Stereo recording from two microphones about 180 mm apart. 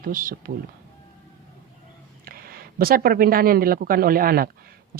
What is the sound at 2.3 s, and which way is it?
Speech, 55° right (ahead or behind).